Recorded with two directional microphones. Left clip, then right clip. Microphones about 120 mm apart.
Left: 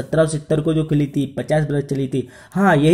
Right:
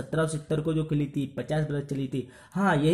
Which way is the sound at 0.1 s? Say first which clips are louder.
Left 11 dB; 20° left (ahead or behind).